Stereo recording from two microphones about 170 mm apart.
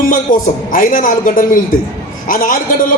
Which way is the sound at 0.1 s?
50° left (ahead or behind).